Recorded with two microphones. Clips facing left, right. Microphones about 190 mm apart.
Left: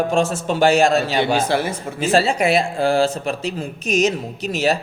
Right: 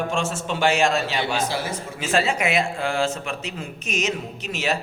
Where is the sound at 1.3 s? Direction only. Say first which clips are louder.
Left 6 dB; 60° left (ahead or behind).